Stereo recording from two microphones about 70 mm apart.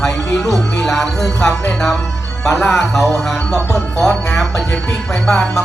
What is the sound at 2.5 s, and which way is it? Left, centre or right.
Speech, left.